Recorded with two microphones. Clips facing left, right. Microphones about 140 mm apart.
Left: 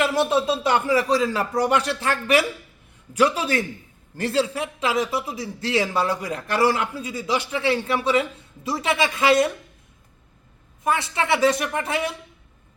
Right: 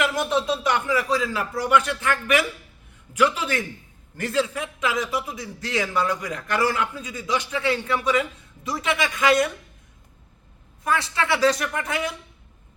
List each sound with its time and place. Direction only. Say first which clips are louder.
0.0 s a man's voice: left 3 dB; 30° left (ahead or behind)
10.8 s a man's voice: left 1 dB; 25° left (ahead or behind)